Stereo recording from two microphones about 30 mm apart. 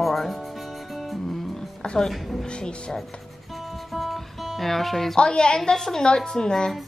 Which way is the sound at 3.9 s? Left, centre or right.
Centre.